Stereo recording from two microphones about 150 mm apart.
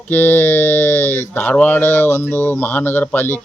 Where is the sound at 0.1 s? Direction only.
15° left (ahead or behind).